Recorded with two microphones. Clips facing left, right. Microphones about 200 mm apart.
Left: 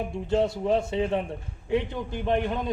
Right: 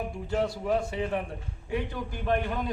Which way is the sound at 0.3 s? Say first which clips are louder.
Left 4 dB; 25° left (ahead or behind).